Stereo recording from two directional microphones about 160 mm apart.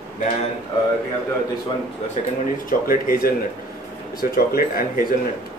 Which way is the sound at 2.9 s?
60° left (ahead or behind).